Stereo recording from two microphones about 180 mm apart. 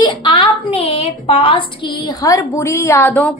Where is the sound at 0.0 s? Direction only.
25° left (ahead or behind).